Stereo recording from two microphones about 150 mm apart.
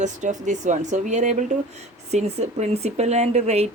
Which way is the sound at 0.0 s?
55° right (ahead or behind).